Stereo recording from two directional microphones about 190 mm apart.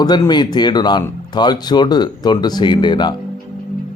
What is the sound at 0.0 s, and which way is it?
A man's voice, 20° left (ahead or behind).